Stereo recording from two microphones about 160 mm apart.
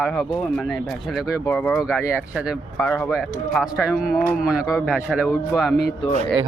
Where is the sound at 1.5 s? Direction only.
10° left (ahead or behind).